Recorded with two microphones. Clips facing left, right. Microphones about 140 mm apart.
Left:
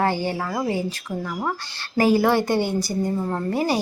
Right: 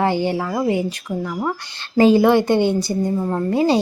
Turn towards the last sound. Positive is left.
turn(degrees=-25)  # may be behind; listen again after turning